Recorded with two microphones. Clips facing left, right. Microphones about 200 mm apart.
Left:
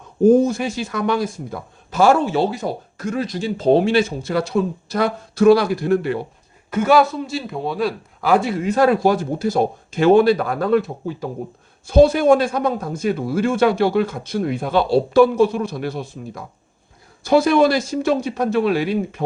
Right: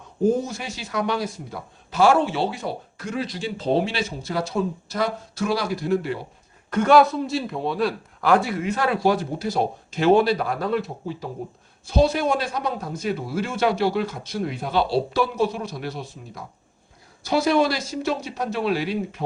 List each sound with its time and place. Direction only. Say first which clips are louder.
0.3 s speech: left 9 dB; 50° left (ahead or behind)
6.7 s a man's voice: left 1 dB; 5° left (ahead or behind)
8.6 s speech: left 6 dB; 40° left (ahead or behind)